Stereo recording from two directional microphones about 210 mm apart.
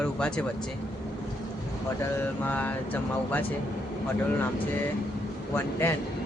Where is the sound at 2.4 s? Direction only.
5° left (ahead or behind).